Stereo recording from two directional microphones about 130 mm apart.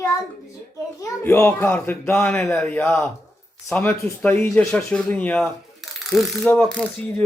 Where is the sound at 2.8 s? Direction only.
20° left (ahead or behind).